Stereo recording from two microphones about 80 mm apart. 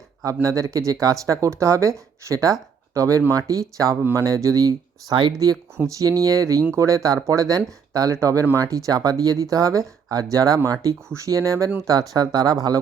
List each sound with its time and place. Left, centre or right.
0.4 s speech: right
11.9 s speech: right